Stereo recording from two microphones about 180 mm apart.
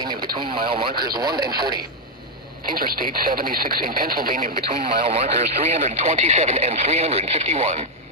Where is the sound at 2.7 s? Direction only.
55° right (ahead or behind).